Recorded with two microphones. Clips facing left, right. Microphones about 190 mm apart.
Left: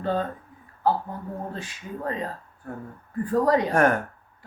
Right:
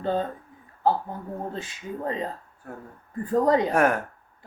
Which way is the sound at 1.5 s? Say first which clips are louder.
Right 1 dB; 25° right (ahead or behind).